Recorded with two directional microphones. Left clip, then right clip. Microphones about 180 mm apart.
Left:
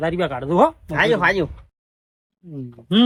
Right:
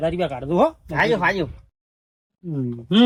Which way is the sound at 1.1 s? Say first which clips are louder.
Left 4 dB; 15° right (ahead or behind).